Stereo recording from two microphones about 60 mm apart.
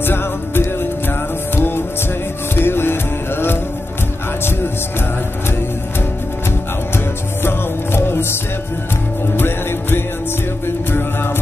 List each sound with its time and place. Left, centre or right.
0.0 s music: left
7.4 s music: left
9.4 s music: left